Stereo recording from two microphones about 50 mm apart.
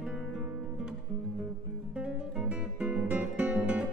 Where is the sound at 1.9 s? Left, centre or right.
Right.